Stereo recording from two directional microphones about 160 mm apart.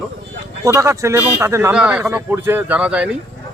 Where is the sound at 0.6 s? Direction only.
20° right (ahead or behind).